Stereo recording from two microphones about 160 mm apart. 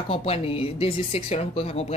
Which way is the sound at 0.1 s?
40° left (ahead or behind).